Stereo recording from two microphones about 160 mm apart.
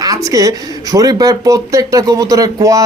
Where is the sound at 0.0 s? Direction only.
20° right (ahead or behind).